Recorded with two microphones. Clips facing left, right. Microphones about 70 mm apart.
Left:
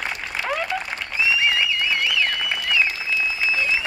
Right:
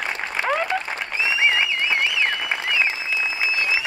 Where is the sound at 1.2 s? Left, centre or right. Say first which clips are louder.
Even; right.